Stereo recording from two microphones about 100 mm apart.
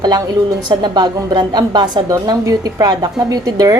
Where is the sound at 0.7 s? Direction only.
45° right (ahead or behind).